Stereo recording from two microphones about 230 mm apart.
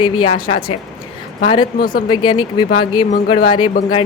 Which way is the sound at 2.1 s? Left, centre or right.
Centre.